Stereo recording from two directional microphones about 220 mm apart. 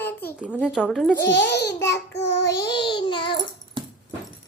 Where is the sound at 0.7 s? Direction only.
Centre (ahead or behind).